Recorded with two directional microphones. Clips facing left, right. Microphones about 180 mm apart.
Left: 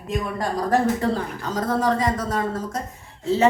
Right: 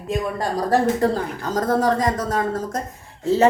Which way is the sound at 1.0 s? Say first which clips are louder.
Right 3 dB; 45° right (ahead or behind).